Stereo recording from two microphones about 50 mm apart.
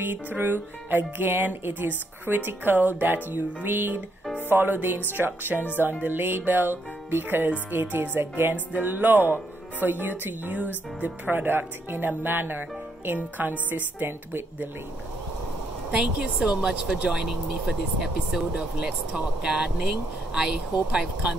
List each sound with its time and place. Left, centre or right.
0.0 s speech: right
16.2 s speech: centre